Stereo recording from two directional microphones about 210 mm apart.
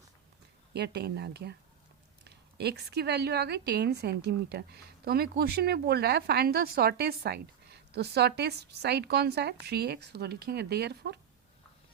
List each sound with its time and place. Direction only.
0.7 s a woman's voice: 50° right (ahead or behind)